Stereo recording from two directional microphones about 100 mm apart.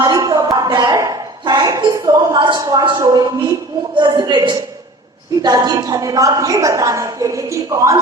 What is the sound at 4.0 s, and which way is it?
A woman's voice, 50° right (ahead or behind).